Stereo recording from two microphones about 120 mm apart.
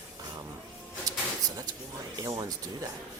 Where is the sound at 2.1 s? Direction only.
30° right (ahead or behind).